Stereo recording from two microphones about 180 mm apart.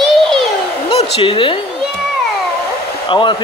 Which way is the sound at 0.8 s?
30° left (ahead or behind).